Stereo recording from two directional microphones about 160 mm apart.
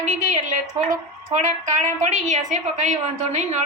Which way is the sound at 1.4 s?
50° right (ahead or behind).